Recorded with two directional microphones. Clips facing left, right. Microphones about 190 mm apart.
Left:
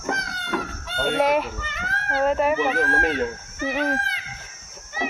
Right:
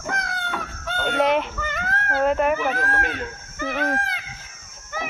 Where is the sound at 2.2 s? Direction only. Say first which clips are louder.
Even; centre (ahead or behind).